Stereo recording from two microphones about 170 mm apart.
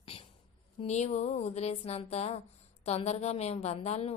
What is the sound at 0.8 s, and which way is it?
Speech, 40° left (ahead or behind).